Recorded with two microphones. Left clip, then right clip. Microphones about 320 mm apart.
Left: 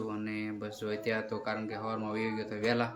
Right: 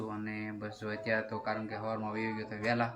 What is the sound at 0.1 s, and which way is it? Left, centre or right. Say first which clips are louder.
Speech: left 3 dB; centre.